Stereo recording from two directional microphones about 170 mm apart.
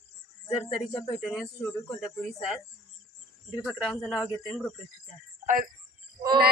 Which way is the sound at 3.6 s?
5° right (ahead or behind).